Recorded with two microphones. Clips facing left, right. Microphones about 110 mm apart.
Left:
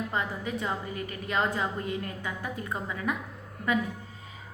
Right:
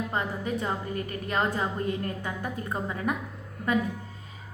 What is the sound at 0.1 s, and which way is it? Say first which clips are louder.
A woman's voice: right 2 dB; 40° right (ahead or behind).